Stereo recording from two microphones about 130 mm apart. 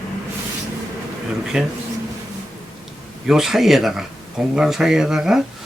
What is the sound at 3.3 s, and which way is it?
Speech, centre (ahead or behind).